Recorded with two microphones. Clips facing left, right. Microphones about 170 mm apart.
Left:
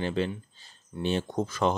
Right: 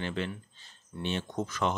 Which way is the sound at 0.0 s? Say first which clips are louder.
Left 5 dB; 35° left (ahead or behind).